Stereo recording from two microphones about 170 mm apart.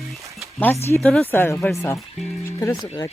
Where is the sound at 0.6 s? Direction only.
15° left (ahead or behind).